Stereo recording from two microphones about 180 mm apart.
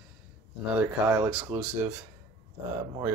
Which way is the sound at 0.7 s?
10° right (ahead or behind).